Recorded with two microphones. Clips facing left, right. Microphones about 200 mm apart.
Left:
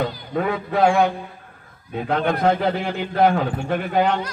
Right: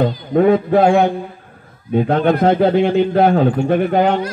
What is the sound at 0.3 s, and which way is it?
A man's voice, 30° right (ahead or behind).